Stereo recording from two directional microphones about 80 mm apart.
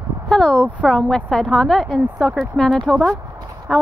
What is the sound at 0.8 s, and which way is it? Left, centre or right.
A woman's voice, centre.